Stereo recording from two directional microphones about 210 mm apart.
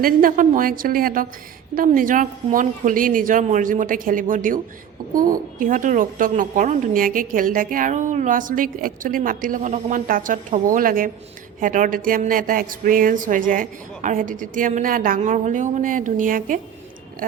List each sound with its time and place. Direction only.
0.0 s a woman's voice: 40° right (ahead or behind)